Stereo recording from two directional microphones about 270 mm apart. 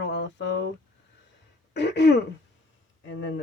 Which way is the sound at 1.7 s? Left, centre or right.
Left.